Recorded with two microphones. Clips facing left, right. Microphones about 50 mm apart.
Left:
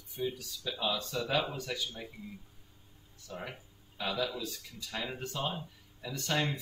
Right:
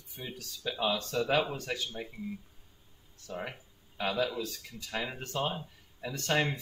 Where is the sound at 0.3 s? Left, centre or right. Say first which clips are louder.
Right 1 dB; right.